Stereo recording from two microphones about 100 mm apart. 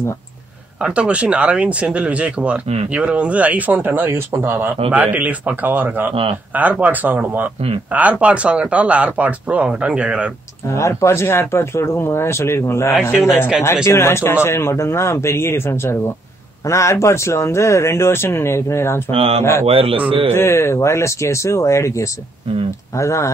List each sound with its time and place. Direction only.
0.8 s speech: 10° right (ahead or behind)
10.7 s speech: 30° left (ahead or behind)
19.0 s speech: 75° right (ahead or behind)
20.3 s speech: 25° left (ahead or behind)